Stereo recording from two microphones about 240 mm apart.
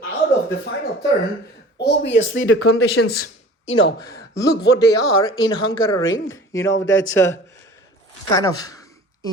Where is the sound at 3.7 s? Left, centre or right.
Left.